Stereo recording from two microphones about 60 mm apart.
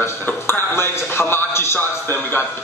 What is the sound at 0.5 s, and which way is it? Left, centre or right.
Music, left.